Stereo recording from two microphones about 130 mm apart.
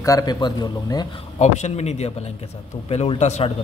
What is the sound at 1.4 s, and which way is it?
Speech, 60° left (ahead or behind).